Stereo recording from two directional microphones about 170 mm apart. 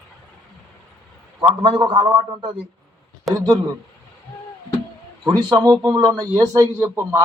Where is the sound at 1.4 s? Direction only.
30° right (ahead or behind).